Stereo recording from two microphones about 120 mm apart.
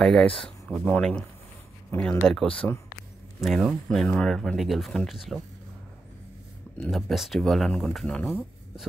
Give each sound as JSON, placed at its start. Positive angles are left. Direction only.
{"t": 0.0, "sound": "speech", "side_deg": 5}
{"t": 6.8, "sound": "speech", "side_deg": 0}